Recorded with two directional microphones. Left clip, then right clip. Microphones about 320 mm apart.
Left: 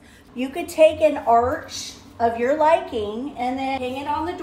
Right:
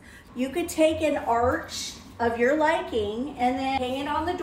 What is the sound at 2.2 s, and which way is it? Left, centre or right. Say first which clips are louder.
Speech: left 4 dB; centre.